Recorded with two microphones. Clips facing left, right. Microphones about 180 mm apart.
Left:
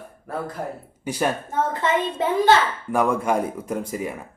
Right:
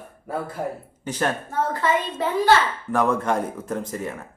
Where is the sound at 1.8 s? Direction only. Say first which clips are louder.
Left 1 dB; 20° left (ahead or behind).